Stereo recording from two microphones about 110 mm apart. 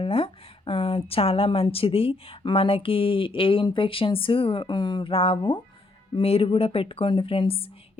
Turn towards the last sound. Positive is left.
turn(degrees=55)  # may be behind; listen again after turning